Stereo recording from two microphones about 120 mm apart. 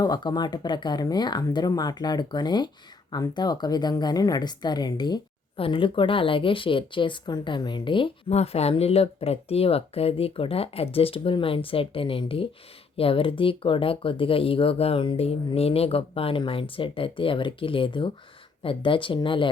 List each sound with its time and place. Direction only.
0.0 s speech: 35° left (ahead or behind)
8.3 s speech: 60° left (ahead or behind); by 19.5 s 45° left (ahead or behind)